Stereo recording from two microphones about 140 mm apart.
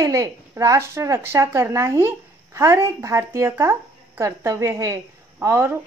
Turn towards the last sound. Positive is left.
turn(degrees=-15)  # may be behind; listen again after turning